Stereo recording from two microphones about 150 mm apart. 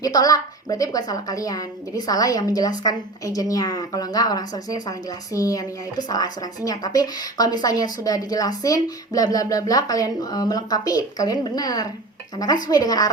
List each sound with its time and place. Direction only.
0.0 s speech: 25° left (ahead or behind)